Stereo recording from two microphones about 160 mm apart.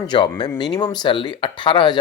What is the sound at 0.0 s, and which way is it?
Speech, 30° left (ahead or behind).